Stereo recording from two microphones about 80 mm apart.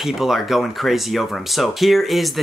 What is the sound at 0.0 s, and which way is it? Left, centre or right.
Speech, centre.